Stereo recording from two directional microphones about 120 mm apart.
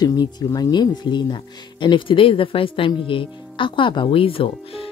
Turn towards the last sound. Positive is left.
turn(degrees=50)  # may be behind; listen again after turning